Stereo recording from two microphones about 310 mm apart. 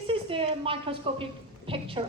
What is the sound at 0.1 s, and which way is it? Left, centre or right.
A woman's voice, centre.